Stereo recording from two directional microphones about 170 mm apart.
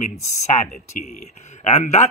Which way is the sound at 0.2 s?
40° left (ahead or behind).